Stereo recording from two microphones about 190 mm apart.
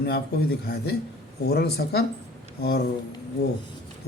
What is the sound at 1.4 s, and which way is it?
A man's voice, 55° left (ahead or behind).